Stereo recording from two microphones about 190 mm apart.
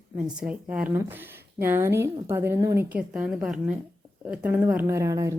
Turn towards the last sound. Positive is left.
turn(degrees=-15)  # may be behind; listen again after turning